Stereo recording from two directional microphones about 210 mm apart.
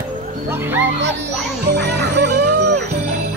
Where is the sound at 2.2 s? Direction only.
50° right (ahead or behind).